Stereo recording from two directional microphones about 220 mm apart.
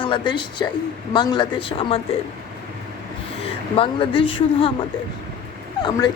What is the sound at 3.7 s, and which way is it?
Speech, 25° left (ahead or behind).